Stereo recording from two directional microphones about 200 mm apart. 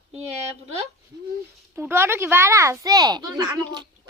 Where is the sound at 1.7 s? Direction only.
10° right (ahead or behind).